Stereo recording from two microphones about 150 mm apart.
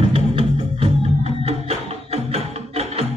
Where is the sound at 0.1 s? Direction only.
40° right (ahead or behind).